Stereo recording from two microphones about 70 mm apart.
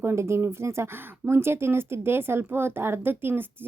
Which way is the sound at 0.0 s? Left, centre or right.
Right.